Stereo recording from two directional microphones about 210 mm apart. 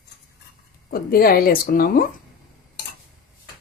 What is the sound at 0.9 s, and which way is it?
Speech, 45° left (ahead or behind).